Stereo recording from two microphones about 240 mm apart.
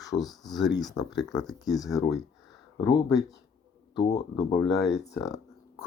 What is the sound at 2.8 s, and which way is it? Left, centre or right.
Speech, centre.